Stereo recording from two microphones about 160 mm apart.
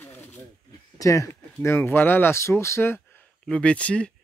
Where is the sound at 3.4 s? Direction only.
5° left (ahead or behind).